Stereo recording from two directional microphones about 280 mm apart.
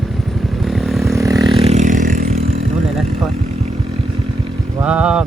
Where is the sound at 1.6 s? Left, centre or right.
Right.